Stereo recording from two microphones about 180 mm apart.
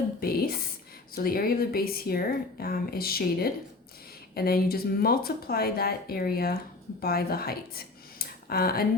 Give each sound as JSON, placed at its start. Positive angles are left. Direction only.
{"t": 0.2, "sound": "a woman's voice", "side_deg": 55}